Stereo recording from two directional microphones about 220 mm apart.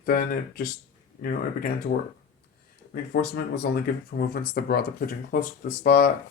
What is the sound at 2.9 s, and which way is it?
Speech, 45° left (ahead or behind).